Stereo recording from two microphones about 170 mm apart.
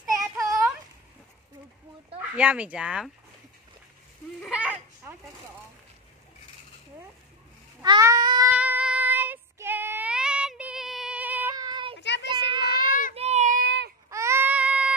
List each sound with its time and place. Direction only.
0.4 s a sound: 20° right (ahead or behind)
2.1 s speech: 10° right (ahead or behind)
4.4 s a sound: 5° right (ahead or behind)
7.8 s cat: 20° right (ahead or behind)
8.5 s child singing: 10° right (ahead or behind)
11.5 s child singing: 25° right (ahead or behind)
12.0 s child singing: 90° left
12.4 s a sound: 30° right (ahead or behind)
13.1 s child singing: 40° right (ahead or behind)
13.6 s baby cry: 80° right
14.1 s baby cry: 15° right (ahead or behind)